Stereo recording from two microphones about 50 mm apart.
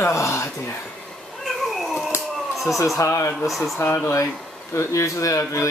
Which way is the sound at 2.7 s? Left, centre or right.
Left.